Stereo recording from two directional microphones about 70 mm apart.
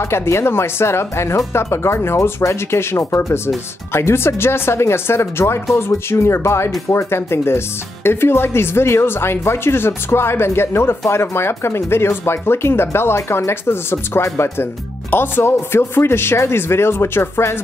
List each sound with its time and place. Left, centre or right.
0.0 s speech: left